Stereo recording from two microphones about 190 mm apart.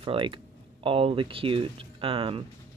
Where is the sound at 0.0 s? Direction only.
25° right (ahead or behind).